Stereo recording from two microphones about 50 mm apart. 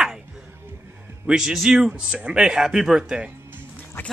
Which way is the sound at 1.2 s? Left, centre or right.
Centre.